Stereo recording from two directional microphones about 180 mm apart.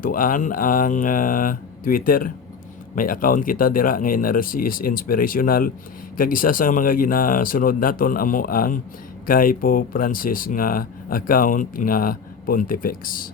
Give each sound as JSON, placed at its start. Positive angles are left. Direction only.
{"t": 0.0, "sound": "speech", "side_deg": 50}